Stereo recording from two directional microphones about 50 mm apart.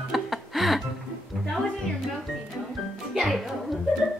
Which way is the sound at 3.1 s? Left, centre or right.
Centre.